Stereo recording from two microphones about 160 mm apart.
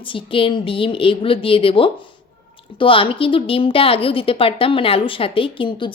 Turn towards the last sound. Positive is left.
turn(degrees=35)  # may be behind; listen again after turning